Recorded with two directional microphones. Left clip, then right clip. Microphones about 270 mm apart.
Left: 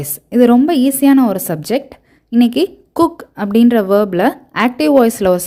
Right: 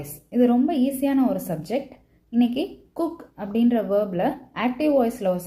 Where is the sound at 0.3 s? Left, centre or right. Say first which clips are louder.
Left 10 dB; left.